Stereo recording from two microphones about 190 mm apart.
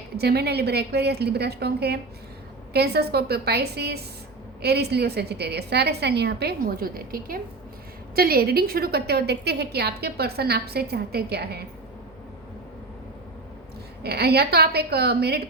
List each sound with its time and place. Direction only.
0.2 s a woman's voice: 60° right (ahead or behind)
14.0 s a woman's voice: 55° right (ahead or behind)